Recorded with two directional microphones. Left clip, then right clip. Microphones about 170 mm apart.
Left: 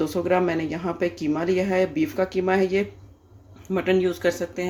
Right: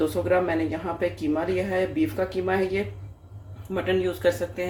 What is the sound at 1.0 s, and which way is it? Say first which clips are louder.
Speech: even; 45° left (ahead or behind).